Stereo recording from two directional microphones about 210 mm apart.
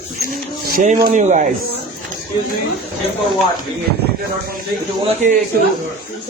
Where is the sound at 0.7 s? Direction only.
35° right (ahead or behind).